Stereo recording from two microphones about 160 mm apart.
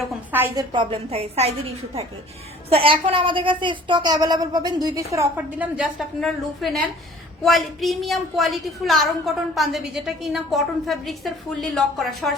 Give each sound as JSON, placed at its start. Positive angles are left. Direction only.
{"t": 0.3, "sound": "a woman's voice", "side_deg": -10}
{"t": 0.5, "sound": "a woman's voice", "side_deg": -30}
{"t": 2.6, "sound": "a woman's voice", "side_deg": -35}
{"t": 5.7, "sound": "a woman's voice", "side_deg": 0}